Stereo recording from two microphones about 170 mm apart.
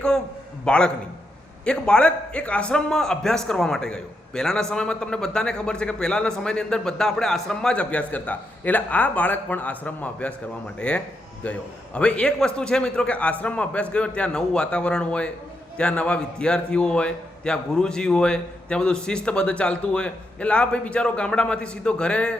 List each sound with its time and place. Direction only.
0.6 s a man's voice: 5° left (ahead or behind)